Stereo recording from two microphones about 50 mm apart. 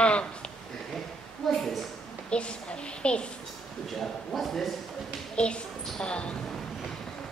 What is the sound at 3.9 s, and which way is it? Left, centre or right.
Speech, centre.